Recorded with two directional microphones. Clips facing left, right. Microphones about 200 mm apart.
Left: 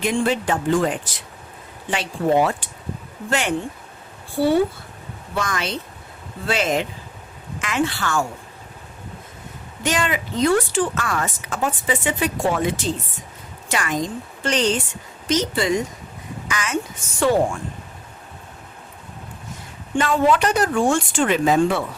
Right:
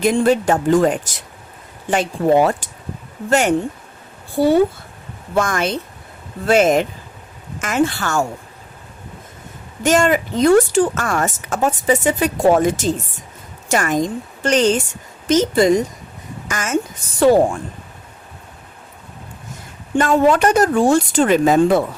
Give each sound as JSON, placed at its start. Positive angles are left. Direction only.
{"t": 0.0, "sound": "speech", "side_deg": -40}
{"t": 9.8, "sound": "a woman's voice", "side_deg": -45}
{"t": 20.0, "sound": "speech", "side_deg": -45}